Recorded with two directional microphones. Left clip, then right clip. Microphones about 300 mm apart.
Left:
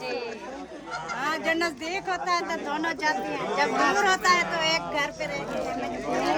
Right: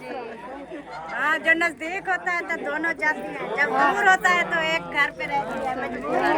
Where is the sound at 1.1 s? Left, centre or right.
Centre.